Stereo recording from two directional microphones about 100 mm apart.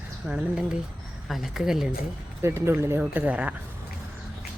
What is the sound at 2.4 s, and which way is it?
Speech, 25° right (ahead or behind).